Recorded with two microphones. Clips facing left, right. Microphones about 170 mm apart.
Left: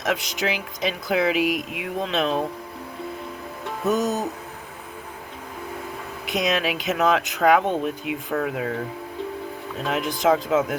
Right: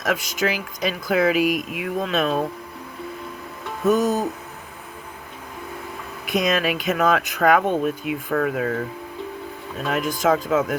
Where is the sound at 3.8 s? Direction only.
20° left (ahead or behind).